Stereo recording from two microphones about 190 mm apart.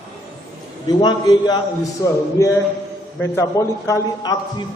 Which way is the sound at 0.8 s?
20° left (ahead or behind).